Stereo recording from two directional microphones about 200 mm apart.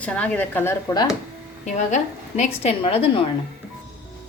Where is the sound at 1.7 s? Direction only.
35° left (ahead or behind).